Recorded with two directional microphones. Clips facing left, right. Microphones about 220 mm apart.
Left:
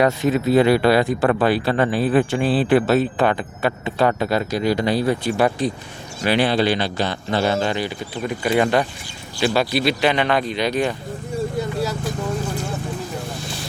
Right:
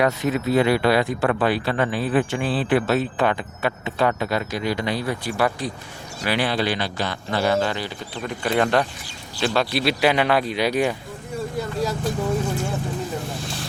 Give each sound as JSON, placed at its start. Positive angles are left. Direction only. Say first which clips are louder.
{"t": 0.0, "sound": "speech", "louder": "left 3 dB", "side_deg": 30}
{"t": 8.1, "sound": "speech", "louder": "left 3 dB", "side_deg": 5}